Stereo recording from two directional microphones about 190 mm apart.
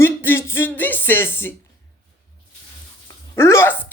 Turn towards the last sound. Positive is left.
turn(degrees=15)  # may be behind; listen again after turning